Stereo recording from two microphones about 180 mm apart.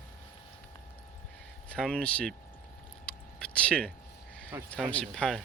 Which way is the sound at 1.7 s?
Centre (ahead or behind).